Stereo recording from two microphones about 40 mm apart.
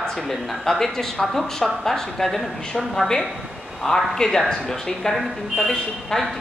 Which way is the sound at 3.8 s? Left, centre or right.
Centre.